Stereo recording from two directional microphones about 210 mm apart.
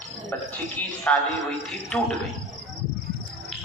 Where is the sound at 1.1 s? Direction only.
5° left (ahead or behind).